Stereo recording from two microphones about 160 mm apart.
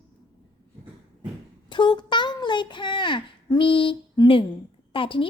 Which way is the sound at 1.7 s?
30° left (ahead or behind).